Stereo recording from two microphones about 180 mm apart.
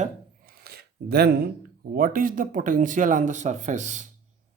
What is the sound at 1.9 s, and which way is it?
Speech, 50° right (ahead or behind).